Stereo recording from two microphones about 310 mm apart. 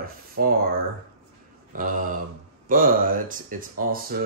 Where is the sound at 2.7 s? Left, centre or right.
Right.